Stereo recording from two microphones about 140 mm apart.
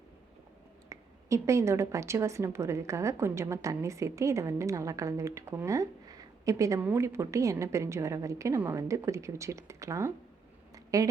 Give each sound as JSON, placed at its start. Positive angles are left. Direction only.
{"t": 0.9, "sound": "a woman's voice", "side_deg": -20}